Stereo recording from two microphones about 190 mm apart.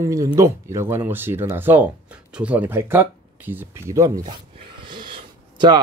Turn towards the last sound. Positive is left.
turn(degrees=-25)  # may be behind; listen again after turning